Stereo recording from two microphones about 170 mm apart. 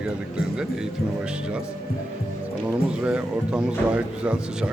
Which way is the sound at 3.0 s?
5° right (ahead or behind).